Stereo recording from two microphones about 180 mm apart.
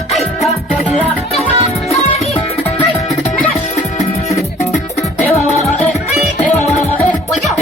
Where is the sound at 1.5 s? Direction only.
35° left (ahead or behind).